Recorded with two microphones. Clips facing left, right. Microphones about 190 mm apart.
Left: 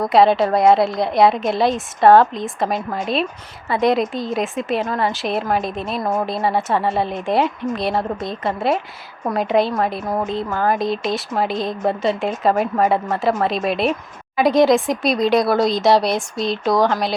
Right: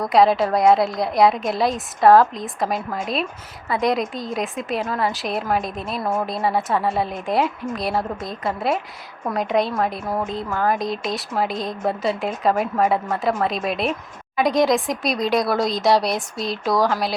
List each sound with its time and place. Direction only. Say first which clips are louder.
0.1 s speech: left 2 dB; centre (ahead or behind)